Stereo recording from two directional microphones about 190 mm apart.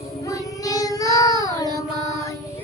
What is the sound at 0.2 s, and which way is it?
Child singing, 15° left (ahead or behind).